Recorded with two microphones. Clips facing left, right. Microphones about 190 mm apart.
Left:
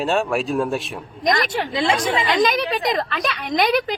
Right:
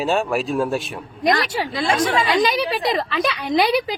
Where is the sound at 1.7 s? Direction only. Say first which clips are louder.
Left 3 dB; 25° left (ahead or behind).